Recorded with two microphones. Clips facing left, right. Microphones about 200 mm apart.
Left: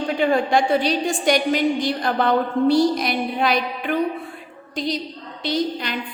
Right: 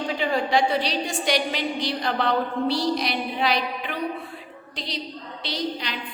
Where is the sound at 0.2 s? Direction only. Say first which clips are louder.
Left 4 dB; 50° left (ahead or behind).